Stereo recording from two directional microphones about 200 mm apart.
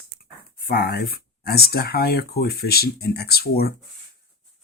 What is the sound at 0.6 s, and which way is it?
Speech, 50° left (ahead or behind).